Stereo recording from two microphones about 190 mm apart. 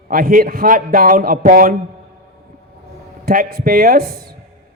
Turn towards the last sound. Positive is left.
turn(degrees=-55)  # may be behind; listen again after turning